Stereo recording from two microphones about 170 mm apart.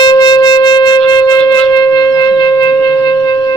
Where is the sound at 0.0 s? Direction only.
25° left (ahead or behind).